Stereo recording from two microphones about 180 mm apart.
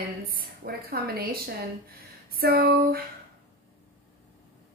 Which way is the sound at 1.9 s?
60° right (ahead or behind).